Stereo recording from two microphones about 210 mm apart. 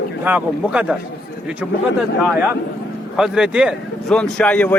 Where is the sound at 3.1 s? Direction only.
5° right (ahead or behind).